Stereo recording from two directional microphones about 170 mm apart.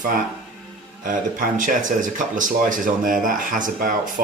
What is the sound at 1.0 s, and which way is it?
Speech, 50° right (ahead or behind).